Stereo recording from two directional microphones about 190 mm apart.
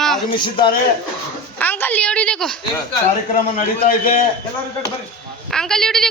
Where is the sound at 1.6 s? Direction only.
10° left (ahead or behind).